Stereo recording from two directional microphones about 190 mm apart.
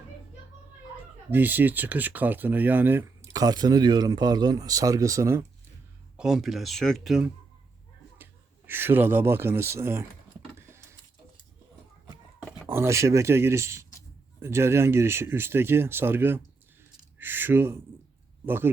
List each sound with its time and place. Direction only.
1.3 s speech: 10° right (ahead or behind)
6.1 s speech: centre (ahead or behind)
12.6 s speech: 15° right (ahead or behind)